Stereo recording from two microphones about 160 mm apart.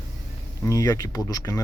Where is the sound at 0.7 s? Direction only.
20° left (ahead or behind).